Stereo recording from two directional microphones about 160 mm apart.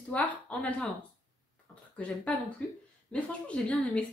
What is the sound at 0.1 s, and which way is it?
Speech, 10° left (ahead or behind).